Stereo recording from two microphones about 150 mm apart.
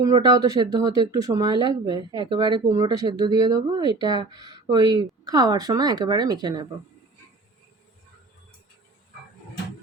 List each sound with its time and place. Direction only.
0.0 s speech: 25° right (ahead or behind)